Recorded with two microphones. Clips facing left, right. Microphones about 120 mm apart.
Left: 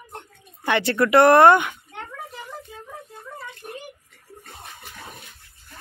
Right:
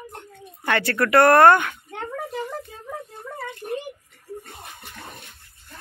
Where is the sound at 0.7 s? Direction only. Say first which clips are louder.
Left 2 dB; 20° left (ahead or behind).